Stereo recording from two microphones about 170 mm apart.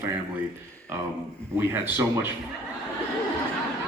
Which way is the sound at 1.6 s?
15° right (ahead or behind).